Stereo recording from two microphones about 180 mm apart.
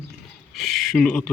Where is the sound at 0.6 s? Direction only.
Centre (ahead or behind).